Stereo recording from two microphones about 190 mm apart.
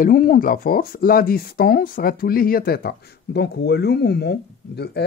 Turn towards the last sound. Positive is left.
turn(degrees=60)  # may be behind; listen again after turning